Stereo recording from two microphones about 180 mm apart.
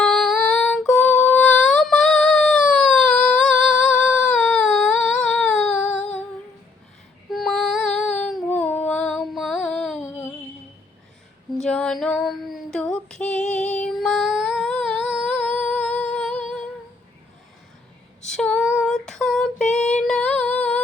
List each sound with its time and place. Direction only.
0.0 s female singing: 5° left (ahead or behind)
5.2 s a sound: 5° left (ahead or behind)
7.3 s female singing: centre (ahead or behind)
10.0 s a sound: 15° left (ahead or behind)
11.5 s female singing: 5° left (ahead or behind)
13.5 s music: 40° left (ahead or behind)
13.7 s female singing: 5° left (ahead or behind)
15.7 s music: 5° left (ahead or behind)
18.3 s female singing: 5° left (ahead or behind)